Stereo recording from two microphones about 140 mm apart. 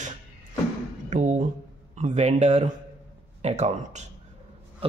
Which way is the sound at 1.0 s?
60° right (ahead or behind).